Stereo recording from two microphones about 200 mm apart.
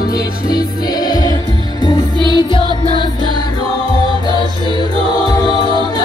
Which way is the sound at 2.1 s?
25° right (ahead or behind).